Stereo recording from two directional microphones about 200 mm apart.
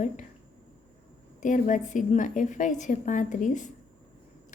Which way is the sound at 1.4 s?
40° left (ahead or behind).